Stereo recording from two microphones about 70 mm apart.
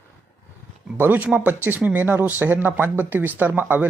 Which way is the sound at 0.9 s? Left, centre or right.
Right.